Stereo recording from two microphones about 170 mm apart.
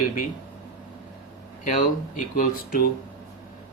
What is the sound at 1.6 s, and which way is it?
Speech, 50° left (ahead or behind).